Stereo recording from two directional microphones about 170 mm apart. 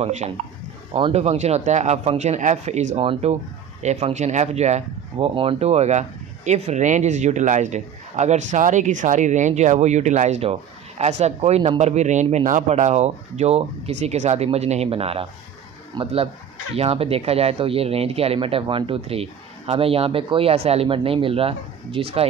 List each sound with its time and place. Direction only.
0.0 s speech: 40° right (ahead or behind)